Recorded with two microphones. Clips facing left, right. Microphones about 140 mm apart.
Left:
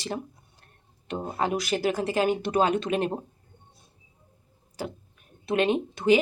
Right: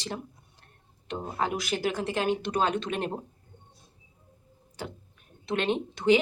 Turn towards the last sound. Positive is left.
turn(degrees=5)  # may be behind; listen again after turning